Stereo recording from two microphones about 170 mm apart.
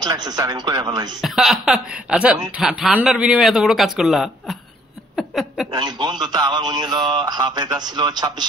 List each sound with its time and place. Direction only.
0.0 s a man's voice: 25° right (ahead or behind)
1.2 s speech: centre (ahead or behind)
5.1 s a sound: centre (ahead or behind)
5.7 s a man's voice: 25° right (ahead or behind)